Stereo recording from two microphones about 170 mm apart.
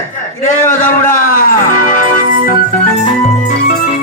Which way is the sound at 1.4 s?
55° left (ahead or behind).